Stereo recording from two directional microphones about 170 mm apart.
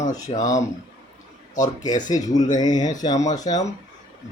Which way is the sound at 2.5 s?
25° left (ahead or behind).